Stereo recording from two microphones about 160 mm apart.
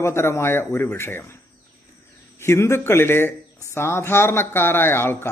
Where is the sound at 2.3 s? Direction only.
15° left (ahead or behind).